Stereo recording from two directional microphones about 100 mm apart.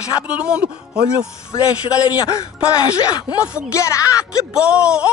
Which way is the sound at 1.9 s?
35° left (ahead or behind).